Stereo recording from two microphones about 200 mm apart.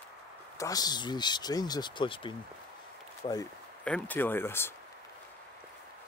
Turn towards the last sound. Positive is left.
turn(degrees=10)  # may be behind; listen again after turning